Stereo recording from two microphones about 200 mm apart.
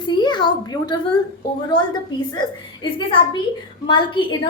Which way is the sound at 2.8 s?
20° left (ahead or behind).